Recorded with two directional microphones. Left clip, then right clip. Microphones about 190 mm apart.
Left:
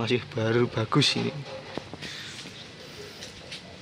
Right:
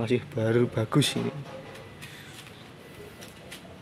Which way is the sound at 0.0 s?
15° right (ahead or behind).